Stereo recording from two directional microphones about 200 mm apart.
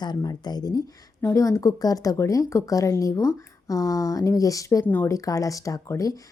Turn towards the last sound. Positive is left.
turn(degrees=15)  # may be behind; listen again after turning